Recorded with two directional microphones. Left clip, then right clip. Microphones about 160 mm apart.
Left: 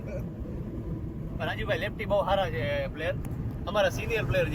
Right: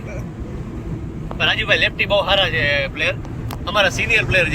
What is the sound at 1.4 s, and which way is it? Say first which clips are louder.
Speech: right 15 dB; 30° left (ahead or behind).